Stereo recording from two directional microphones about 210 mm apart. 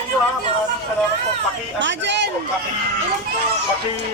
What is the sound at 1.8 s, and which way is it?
Speech, 55° right (ahead or behind).